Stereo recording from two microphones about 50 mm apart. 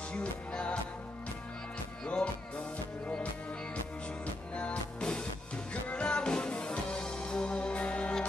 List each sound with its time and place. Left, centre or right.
0.1 s music: left
4.6 s music: left